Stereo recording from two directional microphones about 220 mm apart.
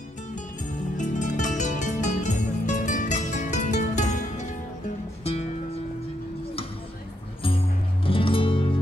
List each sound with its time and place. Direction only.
0.9 s music: 35° left (ahead or behind)
7.4 s music: 25° left (ahead or behind)